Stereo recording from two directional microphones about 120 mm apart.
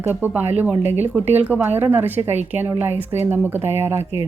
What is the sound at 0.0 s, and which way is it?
Speech, 15° right (ahead or behind).